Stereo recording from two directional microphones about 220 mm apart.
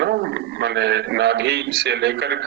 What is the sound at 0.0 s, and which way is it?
A man's voice, 50° right (ahead or behind).